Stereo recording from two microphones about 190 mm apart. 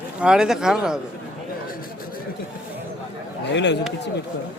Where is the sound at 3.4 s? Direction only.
65° left (ahead or behind).